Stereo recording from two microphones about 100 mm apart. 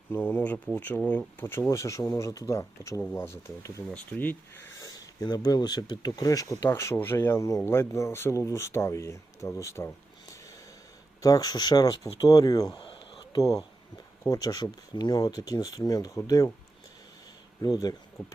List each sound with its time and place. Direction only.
0.1 s speech: 15° left (ahead or behind)
5.2 s speech: 45° left (ahead or behind)
6.7 s speech: 25° left (ahead or behind)
17.6 s speech: 40° left (ahead or behind)
18.2 s speech: 10° left (ahead or behind)